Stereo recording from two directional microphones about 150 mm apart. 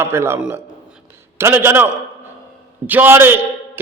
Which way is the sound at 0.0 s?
15° right (ahead or behind).